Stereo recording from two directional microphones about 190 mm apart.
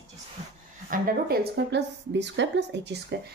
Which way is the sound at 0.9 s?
45° right (ahead or behind).